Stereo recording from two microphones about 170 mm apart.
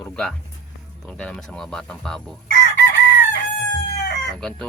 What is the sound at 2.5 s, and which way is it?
Chicken, 90° left.